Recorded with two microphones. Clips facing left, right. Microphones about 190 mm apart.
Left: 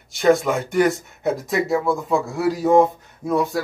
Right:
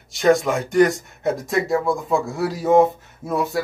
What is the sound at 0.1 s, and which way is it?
Speech, centre (ahead or behind).